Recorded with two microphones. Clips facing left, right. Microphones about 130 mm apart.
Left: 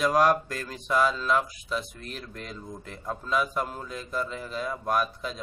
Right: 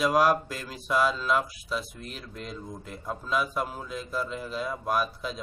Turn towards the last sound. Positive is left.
turn(degrees=-5)  # may be behind; listen again after turning